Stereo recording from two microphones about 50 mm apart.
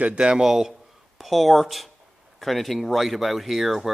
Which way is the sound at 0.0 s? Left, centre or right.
Right.